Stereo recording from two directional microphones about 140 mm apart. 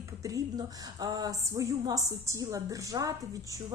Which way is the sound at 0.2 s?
25° right (ahead or behind).